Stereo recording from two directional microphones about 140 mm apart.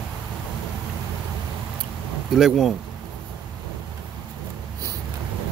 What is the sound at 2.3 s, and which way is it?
Speech, centre (ahead or behind).